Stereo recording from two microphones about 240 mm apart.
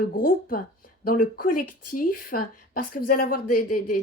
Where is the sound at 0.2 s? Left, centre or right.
Left.